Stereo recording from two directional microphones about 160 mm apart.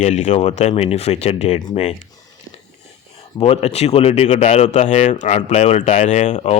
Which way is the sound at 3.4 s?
40° left (ahead or behind).